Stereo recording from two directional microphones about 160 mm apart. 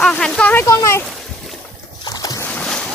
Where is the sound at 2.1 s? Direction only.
25° left (ahead or behind).